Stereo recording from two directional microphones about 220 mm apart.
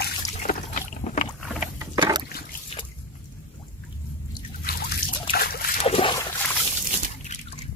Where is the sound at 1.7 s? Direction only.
15° right (ahead or behind).